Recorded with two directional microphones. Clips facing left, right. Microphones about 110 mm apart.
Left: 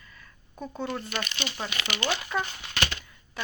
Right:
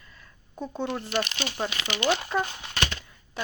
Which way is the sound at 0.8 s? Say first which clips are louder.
Right 4 dB; 20° right (ahead or behind).